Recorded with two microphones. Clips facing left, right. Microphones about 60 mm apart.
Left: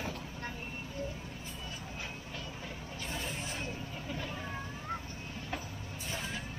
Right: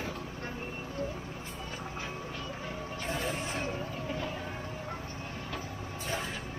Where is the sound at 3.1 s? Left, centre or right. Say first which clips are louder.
Right 6 dB; right.